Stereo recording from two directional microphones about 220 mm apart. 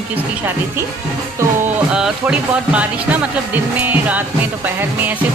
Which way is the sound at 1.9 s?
5° right (ahead or behind).